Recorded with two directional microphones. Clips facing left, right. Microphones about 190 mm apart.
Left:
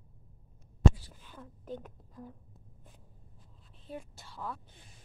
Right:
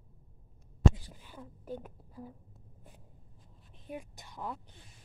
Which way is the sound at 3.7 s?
15° right (ahead or behind).